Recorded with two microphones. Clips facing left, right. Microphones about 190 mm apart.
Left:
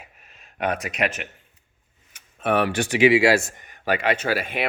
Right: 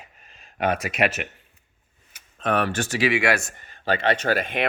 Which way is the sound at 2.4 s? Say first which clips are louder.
Left 2 dB; 10° left (ahead or behind).